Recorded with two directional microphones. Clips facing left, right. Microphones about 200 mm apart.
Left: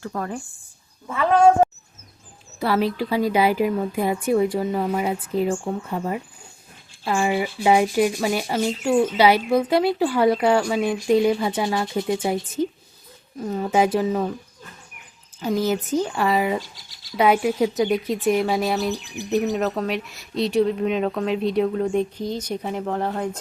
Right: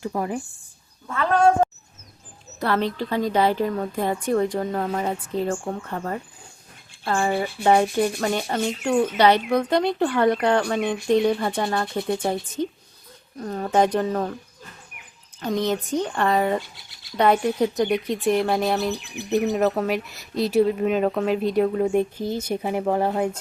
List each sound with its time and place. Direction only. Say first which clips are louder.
0.0 s speech: right 2 dB; 15° right (ahead or behind)
1.0 s speech: left 3 dB; 10° left (ahead or behind)
15.4 s speech: left 2 dB; 5° left (ahead or behind)
16.6 s speech: even; 60° right (ahead or behind)
17.2 s speech: left 1 dB; 5° left (ahead or behind)